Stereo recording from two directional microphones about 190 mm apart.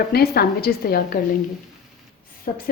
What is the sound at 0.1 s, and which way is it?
A woman's voice, 55° left (ahead or behind).